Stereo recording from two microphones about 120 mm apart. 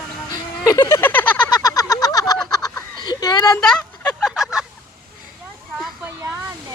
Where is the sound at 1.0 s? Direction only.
15° left (ahead or behind).